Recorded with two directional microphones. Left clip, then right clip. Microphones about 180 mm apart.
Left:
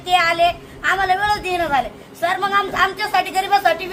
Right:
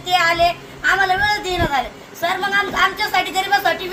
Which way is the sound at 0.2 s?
30° left (ahead or behind).